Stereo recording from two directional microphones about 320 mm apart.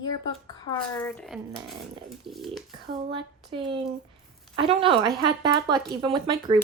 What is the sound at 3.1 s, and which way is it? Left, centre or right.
Speech, centre.